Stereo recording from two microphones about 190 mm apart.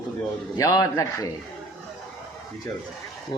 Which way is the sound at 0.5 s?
20° left (ahead or behind).